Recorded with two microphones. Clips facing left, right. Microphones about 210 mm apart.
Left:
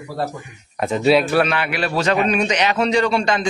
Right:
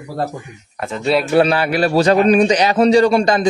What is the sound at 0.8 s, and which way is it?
Speech, 15° left (ahead or behind).